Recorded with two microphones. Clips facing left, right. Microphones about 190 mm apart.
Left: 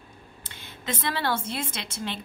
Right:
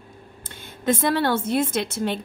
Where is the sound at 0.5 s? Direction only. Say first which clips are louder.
Right 11 dB; 45° right (ahead or behind).